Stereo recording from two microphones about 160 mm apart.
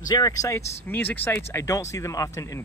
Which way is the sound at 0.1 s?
25° left (ahead or behind).